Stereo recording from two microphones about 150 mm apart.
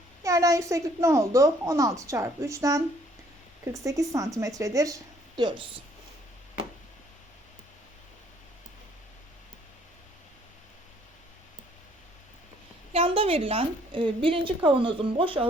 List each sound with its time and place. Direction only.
0.2 s a woman's voice: 20° right (ahead or behind)
3.8 s a woman's voice: 20° right (ahead or behind)
12.9 s a woman's voice: 40° right (ahead or behind)